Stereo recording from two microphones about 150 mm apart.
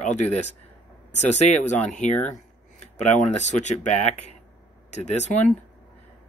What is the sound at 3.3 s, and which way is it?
Speech, 50° left (ahead or behind).